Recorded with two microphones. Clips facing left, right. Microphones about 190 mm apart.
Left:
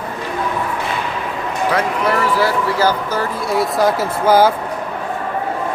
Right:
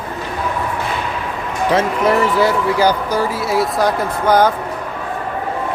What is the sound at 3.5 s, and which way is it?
Speech, centre (ahead or behind).